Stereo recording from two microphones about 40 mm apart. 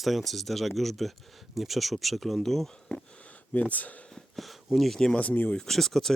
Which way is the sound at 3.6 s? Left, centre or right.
Left.